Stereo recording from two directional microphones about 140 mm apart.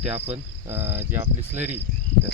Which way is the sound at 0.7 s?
15° right (ahead or behind).